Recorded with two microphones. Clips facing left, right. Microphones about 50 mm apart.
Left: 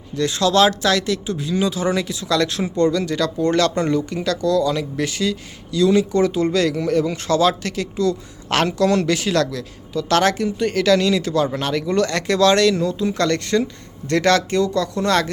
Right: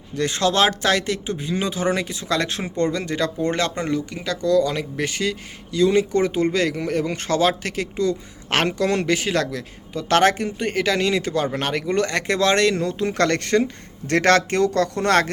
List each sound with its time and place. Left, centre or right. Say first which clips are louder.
0.2 s speech: left 3 dB; right
3.8 s speech: left 4 dB; centre
4.4 s speech: right 1 dB; right